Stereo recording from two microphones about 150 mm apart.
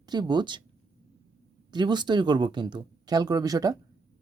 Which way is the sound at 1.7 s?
30° right (ahead or behind).